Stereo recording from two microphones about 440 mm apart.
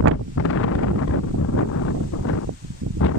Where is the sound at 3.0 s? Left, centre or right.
Left.